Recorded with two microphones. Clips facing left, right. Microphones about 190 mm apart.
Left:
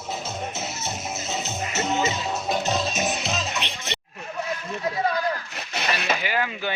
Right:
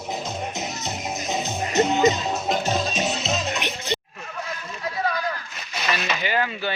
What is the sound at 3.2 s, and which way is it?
Music, 15° right (ahead or behind).